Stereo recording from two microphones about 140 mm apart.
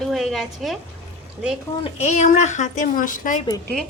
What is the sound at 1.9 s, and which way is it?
A woman's voice, 50° left (ahead or behind).